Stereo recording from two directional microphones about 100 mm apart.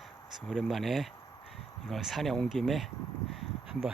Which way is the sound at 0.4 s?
5° left (ahead or behind).